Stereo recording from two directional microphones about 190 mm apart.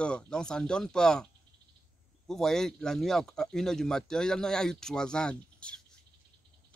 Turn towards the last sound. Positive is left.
turn(degrees=5)  # may be behind; listen again after turning